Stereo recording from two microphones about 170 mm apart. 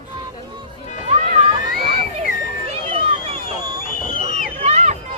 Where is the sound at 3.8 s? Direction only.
55° left (ahead or behind).